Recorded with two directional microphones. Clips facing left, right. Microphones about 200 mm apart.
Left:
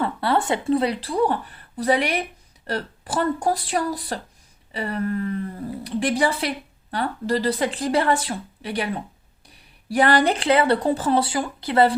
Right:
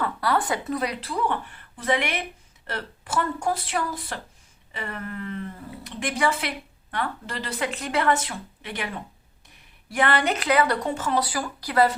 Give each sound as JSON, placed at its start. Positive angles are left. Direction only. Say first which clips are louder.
{"t": 0.0, "sound": "speech", "louder": "left 3 dB", "side_deg": 25}
{"t": 9.9, "sound": "speech", "louder": "left 5 dB", "side_deg": 35}